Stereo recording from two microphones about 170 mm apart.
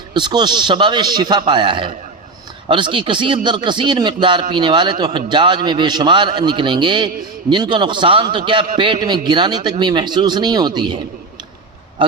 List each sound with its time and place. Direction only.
0.1 s speech: 25° right (ahead or behind)